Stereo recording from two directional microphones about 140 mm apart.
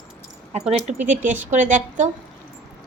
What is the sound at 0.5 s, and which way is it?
Speech, 55° right (ahead or behind).